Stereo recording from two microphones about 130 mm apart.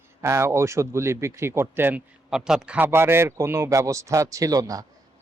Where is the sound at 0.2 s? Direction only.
20° right (ahead or behind).